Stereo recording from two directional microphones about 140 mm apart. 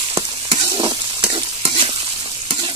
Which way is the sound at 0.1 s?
35° right (ahead or behind).